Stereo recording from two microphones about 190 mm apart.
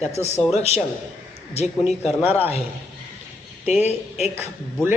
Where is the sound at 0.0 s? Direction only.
35° left (ahead or behind).